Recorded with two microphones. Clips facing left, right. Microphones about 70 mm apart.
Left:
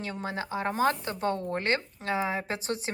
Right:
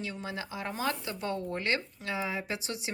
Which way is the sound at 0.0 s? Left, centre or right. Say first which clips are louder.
Left 4 dB; left.